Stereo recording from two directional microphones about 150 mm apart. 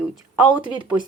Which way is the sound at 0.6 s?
30° right (ahead or behind).